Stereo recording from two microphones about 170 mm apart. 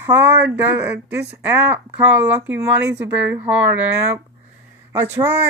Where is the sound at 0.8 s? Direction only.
10° right (ahead or behind).